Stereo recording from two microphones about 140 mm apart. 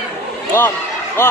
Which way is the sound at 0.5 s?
15° left (ahead or behind).